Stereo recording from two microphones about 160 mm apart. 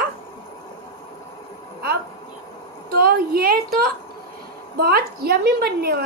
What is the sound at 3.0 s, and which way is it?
A woman's voice, 70° right (ahead or behind).